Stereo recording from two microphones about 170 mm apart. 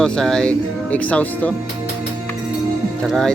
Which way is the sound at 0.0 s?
5° left (ahead or behind).